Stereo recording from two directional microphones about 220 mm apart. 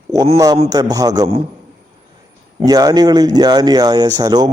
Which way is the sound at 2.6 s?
15° right (ahead or behind).